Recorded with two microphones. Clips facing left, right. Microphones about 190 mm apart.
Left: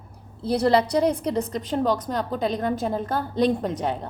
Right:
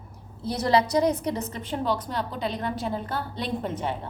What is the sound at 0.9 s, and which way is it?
A woman's voice, 30° left (ahead or behind).